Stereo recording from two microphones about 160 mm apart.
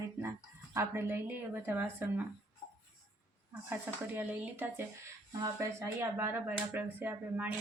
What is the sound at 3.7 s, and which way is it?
Speech, 10° right (ahead or behind).